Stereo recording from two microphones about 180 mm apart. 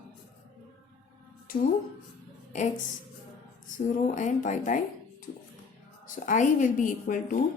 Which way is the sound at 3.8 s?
40° left (ahead or behind).